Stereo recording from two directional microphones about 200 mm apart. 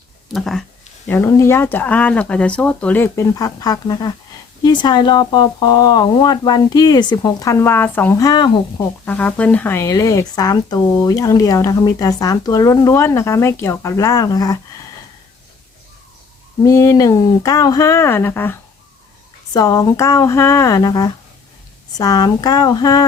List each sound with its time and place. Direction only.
0.3 s speech: centre (ahead or behind)
1.0 s speech: 10° left (ahead or behind)
9.0 s speech: 10° left (ahead or behind)
16.6 s speech: 15° left (ahead or behind)